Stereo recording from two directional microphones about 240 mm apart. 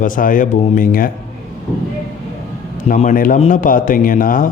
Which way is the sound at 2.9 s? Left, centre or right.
Left.